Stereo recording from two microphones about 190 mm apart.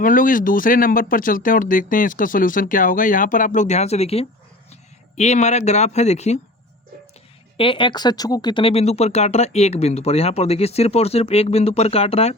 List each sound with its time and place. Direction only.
0.0 s speech: 45° left (ahead or behind)
7.5 s speech: 25° left (ahead or behind)